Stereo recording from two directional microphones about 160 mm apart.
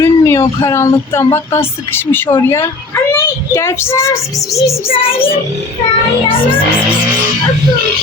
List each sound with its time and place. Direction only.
0.0 s speech: 15° left (ahead or behind)
4.9 s child singing: 35° left (ahead or behind)